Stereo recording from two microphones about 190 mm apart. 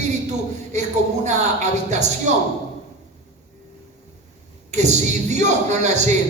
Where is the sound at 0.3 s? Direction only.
35° right (ahead or behind).